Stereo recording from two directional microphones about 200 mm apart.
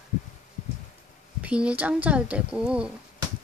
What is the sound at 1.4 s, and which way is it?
Speech, 5° right (ahead or behind).